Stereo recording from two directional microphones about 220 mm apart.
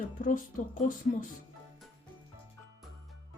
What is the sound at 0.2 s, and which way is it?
Speech, 40° left (ahead or behind).